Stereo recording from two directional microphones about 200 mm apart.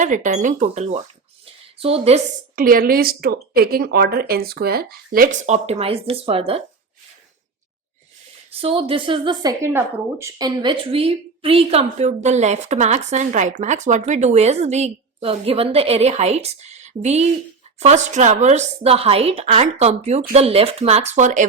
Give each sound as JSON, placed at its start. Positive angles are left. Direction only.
{"t": 0.0, "sound": "a woman's voice", "side_deg": -40}
{"t": 2.6, "sound": "speech", "side_deg": -45}
{"t": 8.4, "sound": "a woman's voice", "side_deg": -30}